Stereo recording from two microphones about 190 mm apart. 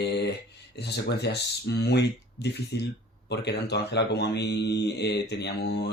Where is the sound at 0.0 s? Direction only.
60° left (ahead or behind).